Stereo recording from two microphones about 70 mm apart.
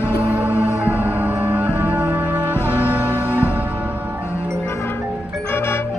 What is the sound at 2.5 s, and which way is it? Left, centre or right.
Music, left.